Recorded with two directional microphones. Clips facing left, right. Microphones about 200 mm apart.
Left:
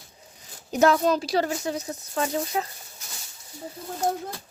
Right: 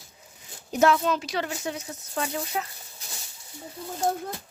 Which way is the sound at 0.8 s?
40° left (ahead or behind).